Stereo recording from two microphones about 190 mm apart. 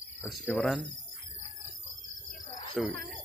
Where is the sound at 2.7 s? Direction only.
Centre (ahead or behind).